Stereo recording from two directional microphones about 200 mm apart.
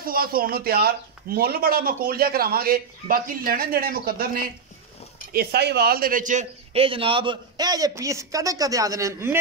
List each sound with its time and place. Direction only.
0.0 s a man's voice: 45° right (ahead or behind); by 9.4 s 15° right (ahead or behind)